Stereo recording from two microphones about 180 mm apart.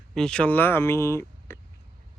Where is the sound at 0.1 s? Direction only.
5° left (ahead or behind).